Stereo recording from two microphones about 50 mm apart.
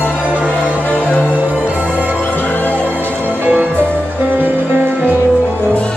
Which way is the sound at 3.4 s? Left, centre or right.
Right.